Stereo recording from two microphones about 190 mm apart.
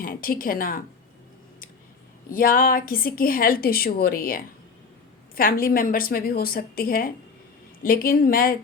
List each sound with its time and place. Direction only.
0.0 s a woman's voice: 50° left (ahead or behind)
2.3 s a woman's voice: 50° left (ahead or behind)